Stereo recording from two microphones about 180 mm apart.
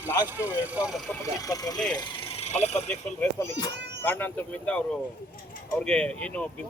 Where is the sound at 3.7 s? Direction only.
70° right (ahead or behind).